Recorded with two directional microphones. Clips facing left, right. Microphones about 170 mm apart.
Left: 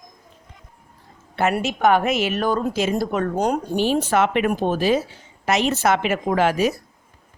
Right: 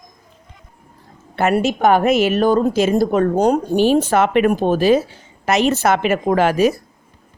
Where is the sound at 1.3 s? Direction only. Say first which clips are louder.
Right 5 dB; 50° right (ahead or behind).